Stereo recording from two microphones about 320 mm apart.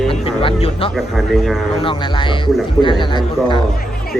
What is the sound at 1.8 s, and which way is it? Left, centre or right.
Speech, centre.